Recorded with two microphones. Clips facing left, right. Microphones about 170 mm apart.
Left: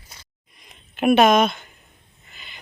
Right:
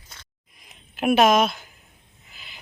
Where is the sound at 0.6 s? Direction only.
Centre (ahead or behind).